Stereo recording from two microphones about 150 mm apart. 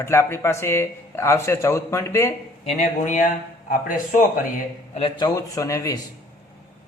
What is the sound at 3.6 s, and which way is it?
Speech, 65° left (ahead or behind).